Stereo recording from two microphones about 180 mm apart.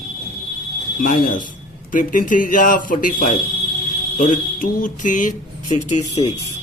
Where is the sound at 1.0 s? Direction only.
45° left (ahead or behind).